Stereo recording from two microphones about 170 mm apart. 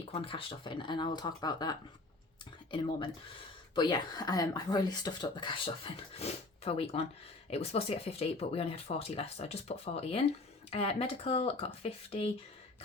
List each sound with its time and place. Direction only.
0.1 s speech: 30° left (ahead or behind)